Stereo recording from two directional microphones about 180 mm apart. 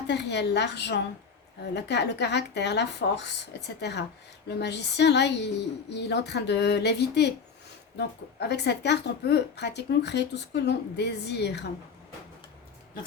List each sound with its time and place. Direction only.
0.1 s a woman's voice: 70° left (ahead or behind)